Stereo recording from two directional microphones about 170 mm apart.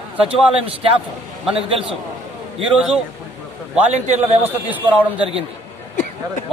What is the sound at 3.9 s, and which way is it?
Speech, 40° right (ahead or behind).